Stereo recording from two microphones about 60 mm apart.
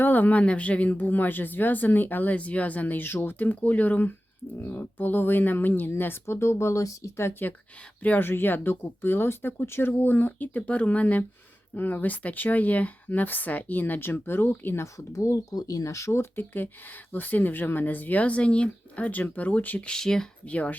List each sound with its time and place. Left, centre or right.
0.0 s speech: left
8.0 s speech: left
15.1 s speech: left
16.3 s speech: left
19.9 s speech: centre
20.5 s speech: left